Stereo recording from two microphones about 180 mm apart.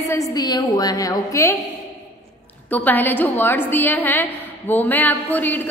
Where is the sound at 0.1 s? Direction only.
20° left (ahead or behind).